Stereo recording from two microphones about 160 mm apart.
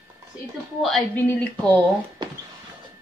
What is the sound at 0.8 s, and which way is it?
Speech, 5° left (ahead or behind).